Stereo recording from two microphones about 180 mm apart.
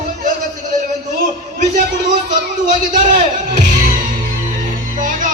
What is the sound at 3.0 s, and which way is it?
Music, 45° right (ahead or behind).